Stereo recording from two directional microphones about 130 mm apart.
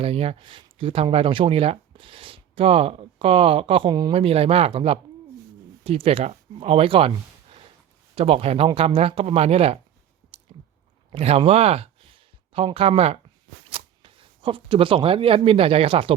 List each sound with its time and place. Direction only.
0.0 s speech: 50° right (ahead or behind); by 4.1 s 35° right (ahead or behind)
4.1 s speech: 50° right (ahead or behind)
8.1 s speech: 50° right (ahead or behind)
10.5 s chewing: 35° right (ahead or behind)
11.1 s speech: 50° right (ahead or behind)